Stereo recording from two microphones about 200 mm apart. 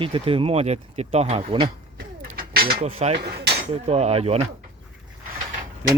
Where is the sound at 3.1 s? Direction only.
55° right (ahead or behind).